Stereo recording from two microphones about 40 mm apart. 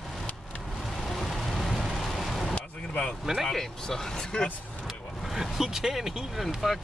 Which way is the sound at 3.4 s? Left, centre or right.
Centre.